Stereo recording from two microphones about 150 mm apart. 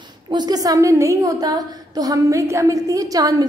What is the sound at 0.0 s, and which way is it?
A woman's voice, 30° right (ahead or behind).